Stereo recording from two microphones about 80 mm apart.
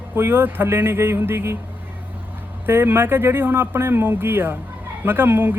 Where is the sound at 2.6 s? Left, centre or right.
Right.